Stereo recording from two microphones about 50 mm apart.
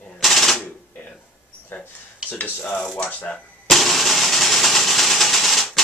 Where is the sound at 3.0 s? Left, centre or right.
Left.